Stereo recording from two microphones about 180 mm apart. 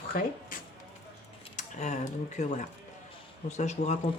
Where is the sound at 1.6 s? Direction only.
40° left (ahead or behind).